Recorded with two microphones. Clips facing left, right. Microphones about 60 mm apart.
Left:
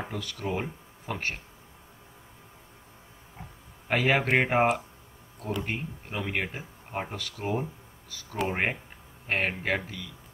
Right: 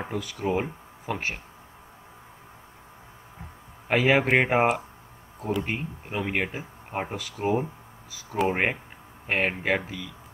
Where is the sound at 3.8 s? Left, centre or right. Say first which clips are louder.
Right 4 dB; centre.